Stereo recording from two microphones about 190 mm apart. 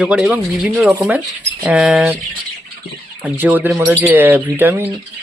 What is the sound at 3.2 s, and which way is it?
Speech, 10° right (ahead or behind).